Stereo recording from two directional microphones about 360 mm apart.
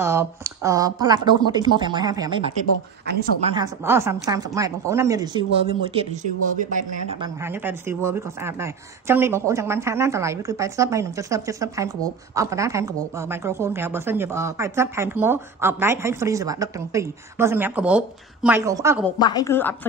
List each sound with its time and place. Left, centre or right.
0.0 s speech: centre
3.5 s speech: centre
19.0 s a woman's voice: centre